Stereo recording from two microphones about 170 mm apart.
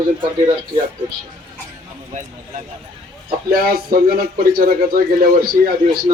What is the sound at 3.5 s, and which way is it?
Speech, 60° right (ahead or behind).